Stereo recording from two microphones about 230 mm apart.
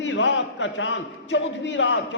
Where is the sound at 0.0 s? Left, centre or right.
Left.